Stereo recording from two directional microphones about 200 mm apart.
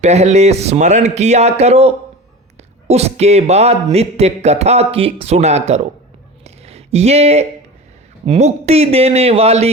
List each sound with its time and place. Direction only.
0.0 s speech: 35° right (ahead or behind)
6.4 s a sound: 30° right (ahead or behind)
8.3 s speech: 35° right (ahead or behind)